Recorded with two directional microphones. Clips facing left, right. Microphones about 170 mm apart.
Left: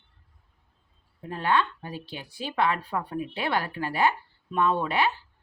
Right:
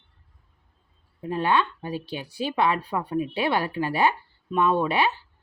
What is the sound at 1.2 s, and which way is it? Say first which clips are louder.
Speech: right 2 dB; 20° right (ahead or behind).